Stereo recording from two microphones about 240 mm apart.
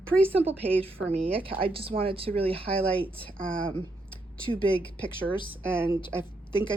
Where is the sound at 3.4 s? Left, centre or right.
Right.